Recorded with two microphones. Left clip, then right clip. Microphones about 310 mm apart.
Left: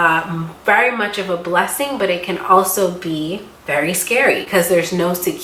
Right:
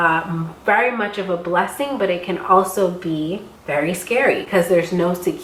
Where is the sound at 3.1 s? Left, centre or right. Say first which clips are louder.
Left 1 dB; right.